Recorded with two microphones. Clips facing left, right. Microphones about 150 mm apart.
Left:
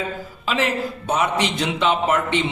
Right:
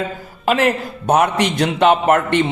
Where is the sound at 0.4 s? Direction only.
55° right (ahead or behind).